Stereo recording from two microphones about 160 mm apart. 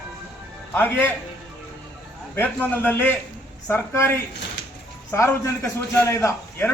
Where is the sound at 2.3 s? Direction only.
10° left (ahead or behind).